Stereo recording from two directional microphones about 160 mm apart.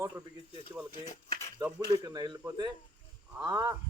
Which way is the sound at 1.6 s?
25° right (ahead or behind).